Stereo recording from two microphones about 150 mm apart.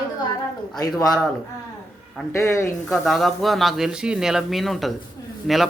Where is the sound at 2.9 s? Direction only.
Centre (ahead or behind).